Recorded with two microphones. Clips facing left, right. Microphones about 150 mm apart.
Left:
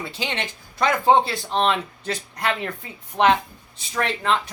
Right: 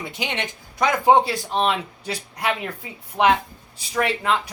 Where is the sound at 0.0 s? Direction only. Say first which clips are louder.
Even; 15° right (ahead or behind).